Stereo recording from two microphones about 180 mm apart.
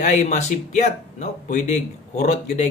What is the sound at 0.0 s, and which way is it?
A man's voice, 40° left (ahead or behind).